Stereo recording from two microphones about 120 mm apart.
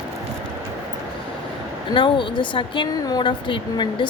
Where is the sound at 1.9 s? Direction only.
40° left (ahead or behind).